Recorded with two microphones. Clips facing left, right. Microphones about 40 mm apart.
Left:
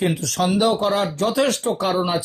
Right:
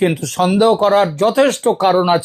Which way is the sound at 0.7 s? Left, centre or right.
Right.